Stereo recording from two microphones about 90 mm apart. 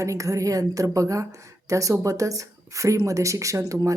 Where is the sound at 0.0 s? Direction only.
35° right (ahead or behind).